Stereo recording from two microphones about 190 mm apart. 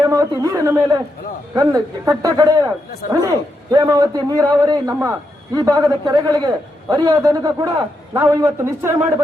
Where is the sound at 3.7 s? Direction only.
20° right (ahead or behind).